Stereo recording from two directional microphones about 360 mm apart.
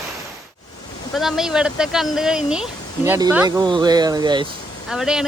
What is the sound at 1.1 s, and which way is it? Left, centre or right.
Speech, centre.